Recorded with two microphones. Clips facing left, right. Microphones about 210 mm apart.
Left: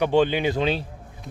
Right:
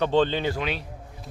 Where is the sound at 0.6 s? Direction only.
30° left (ahead or behind).